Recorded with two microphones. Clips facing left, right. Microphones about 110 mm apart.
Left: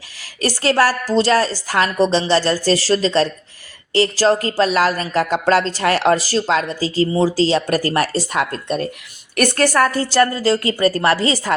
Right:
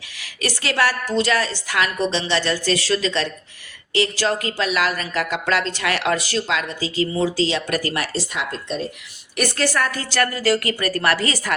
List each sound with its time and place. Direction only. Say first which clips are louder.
0.2 s a woman's voice: left 6 dB; 40° left (ahead or behind)
10.3 s speech: left 3 dB; 25° left (ahead or behind)